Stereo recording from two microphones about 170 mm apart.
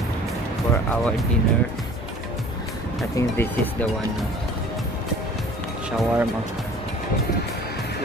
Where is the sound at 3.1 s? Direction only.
15° left (ahead or behind).